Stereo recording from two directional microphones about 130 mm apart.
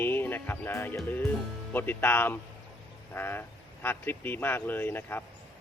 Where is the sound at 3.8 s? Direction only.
15° left (ahead or behind).